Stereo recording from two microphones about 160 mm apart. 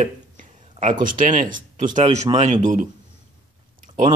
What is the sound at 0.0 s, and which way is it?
Speech, 50° right (ahead or behind).